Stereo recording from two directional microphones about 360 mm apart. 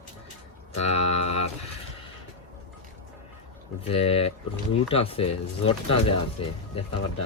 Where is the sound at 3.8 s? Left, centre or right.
Centre.